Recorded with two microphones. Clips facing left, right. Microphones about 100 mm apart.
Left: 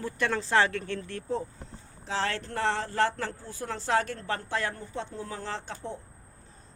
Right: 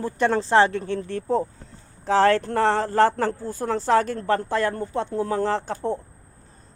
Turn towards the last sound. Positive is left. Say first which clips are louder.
# right 12 dB
turn(degrees=-50)  # may be behind; listen again after turning